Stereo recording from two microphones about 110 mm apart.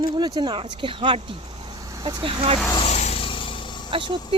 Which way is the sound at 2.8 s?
85° left.